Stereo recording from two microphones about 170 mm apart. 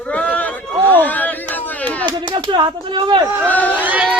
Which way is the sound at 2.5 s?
25° right (ahead or behind).